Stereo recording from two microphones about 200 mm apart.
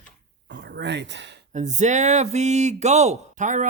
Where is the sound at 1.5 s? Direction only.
35° right (ahead or behind).